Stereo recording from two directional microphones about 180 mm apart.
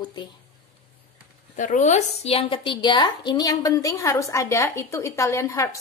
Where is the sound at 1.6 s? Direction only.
45° left (ahead or behind).